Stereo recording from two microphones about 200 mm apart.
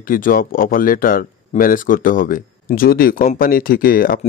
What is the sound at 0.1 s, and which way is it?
Speech, 45° left (ahead or behind).